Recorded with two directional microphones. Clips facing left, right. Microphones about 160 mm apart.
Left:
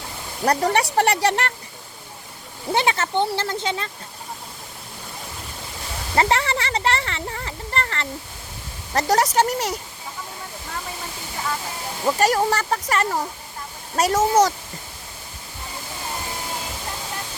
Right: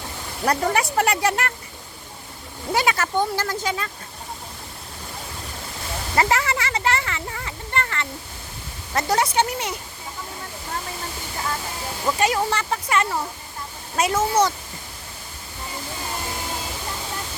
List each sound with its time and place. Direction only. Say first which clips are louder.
0.4 s speech: left 2 dB; 35° left (ahead or behind)
2.7 s speech: left 1 dB; 25° left (ahead or behind)
6.1 s speech: left 1 dB; 30° left (ahead or behind)
12.0 s speech: left 3 dB; 40° left (ahead or behind)